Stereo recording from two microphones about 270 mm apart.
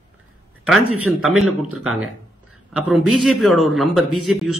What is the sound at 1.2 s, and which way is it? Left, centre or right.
Speech, centre.